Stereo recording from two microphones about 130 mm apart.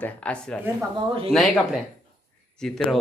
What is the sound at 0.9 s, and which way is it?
Speech, 45° right (ahead or behind).